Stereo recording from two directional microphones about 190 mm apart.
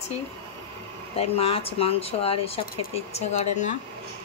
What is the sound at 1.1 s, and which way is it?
Speech, 30° left (ahead or behind).